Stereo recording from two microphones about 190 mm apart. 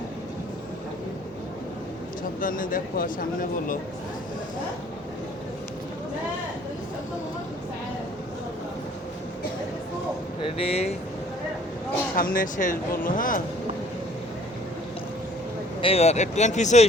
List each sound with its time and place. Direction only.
2.4 s speech: 45° left (ahead or behind)
10.4 s speech: 30° left (ahead or behind)
12.1 s speech: 50° left (ahead or behind)
15.8 s speech: 30° left (ahead or behind)